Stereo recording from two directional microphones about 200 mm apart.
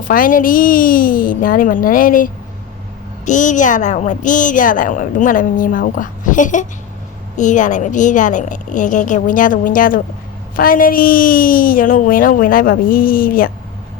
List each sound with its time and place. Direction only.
0.1 s a woman's voice: 45° left (ahead or behind)